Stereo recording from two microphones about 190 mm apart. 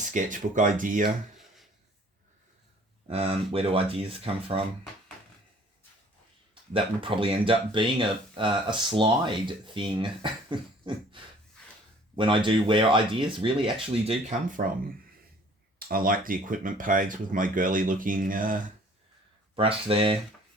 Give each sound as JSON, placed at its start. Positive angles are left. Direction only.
{"t": 0.0, "sound": "speech", "side_deg": -40}
{"t": 3.1, "sound": "speech", "side_deg": -30}
{"t": 6.5, "sound": "speech", "side_deg": -25}
{"t": 15.9, "sound": "speech", "side_deg": -50}
{"t": 19.5, "sound": "speech", "side_deg": -30}